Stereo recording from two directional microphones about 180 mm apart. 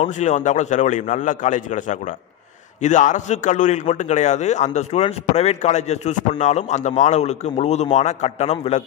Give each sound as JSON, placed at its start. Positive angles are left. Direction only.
{"t": 0.0, "sound": "a man's voice", "side_deg": 40}